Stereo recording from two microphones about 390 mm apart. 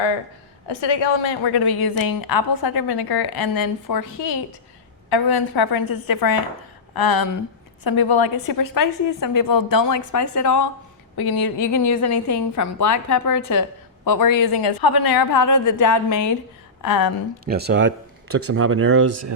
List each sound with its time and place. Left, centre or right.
1.4 s a woman's voice: left
5.0 s a woman's voice: left
11.2 s a woman's voice: left
17.4 s speech: right